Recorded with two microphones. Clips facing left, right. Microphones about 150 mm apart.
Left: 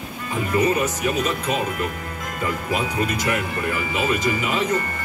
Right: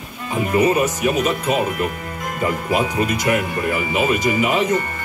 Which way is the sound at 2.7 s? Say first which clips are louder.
Right 4 dB; 70° right (ahead or behind).